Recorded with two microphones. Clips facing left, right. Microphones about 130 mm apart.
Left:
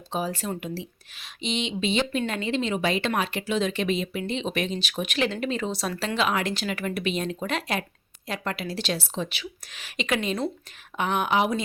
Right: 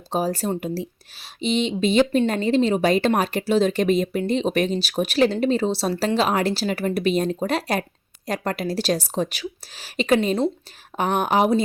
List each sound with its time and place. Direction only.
0.1 s speech: 40° right (ahead or behind)